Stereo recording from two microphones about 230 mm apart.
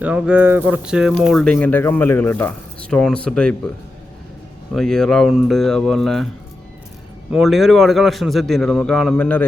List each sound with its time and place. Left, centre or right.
0.0 s speech: centre
4.7 s speech: centre
7.3 s speech: centre